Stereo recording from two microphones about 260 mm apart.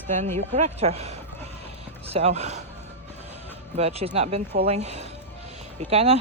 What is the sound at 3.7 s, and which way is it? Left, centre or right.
Speech, right.